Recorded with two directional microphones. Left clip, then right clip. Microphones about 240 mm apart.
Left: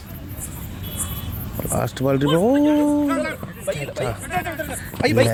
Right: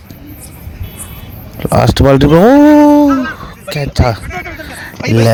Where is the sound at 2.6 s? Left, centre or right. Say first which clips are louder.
Right 13 dB; right.